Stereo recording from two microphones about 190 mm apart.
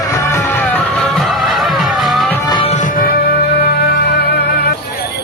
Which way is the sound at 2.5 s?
25° left (ahead or behind).